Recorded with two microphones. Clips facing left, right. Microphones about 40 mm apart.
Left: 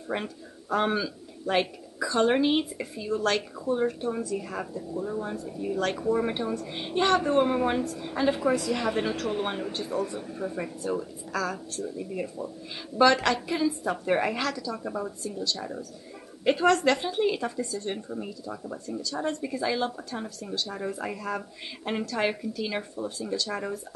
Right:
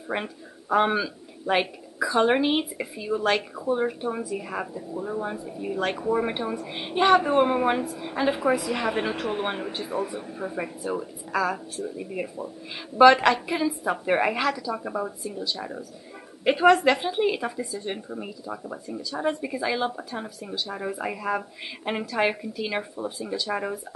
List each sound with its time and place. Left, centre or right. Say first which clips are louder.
0.1 s a woman's voice: right 2 dB; centre